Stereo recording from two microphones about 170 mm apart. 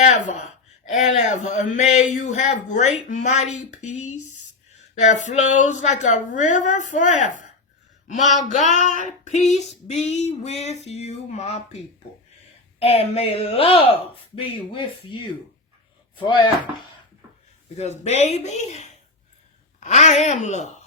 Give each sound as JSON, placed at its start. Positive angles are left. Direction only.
{"t": 0.0, "sound": "a sound", "side_deg": 40}
{"t": 0.9, "sound": "a woman's voice", "side_deg": 45}
{"t": 9.2, "sound": "female singing", "side_deg": 45}
{"t": 12.8, "sound": "female singing", "side_deg": 35}
{"t": 14.3, "sound": "speech", "side_deg": 30}
{"t": 17.7, "sound": "female singing", "side_deg": 40}
{"t": 19.8, "sound": "a woman's voice", "side_deg": 45}